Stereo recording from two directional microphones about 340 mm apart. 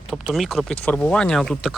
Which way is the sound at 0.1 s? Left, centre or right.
Centre.